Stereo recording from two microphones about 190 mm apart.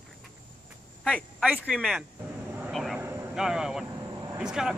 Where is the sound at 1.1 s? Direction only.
5° left (ahead or behind).